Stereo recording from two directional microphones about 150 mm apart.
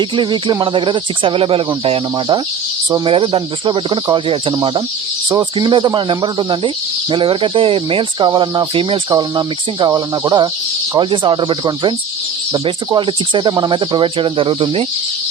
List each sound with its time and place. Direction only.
0.0 s speech: 30° right (ahead or behind)